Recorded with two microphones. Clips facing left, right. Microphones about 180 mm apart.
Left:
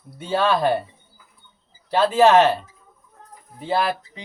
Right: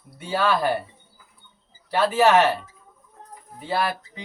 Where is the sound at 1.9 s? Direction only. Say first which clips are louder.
Left 3 dB; 20° left (ahead or behind).